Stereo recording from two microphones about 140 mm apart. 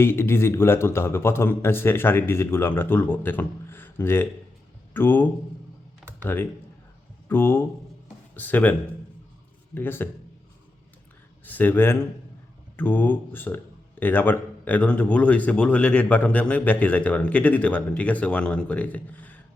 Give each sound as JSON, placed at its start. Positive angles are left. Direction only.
{"t": 0.0, "sound": "a man's voice", "side_deg": 15}
{"t": 9.7, "sound": "a man's voice", "side_deg": 15}
{"t": 11.4, "sound": "a man's voice", "side_deg": 10}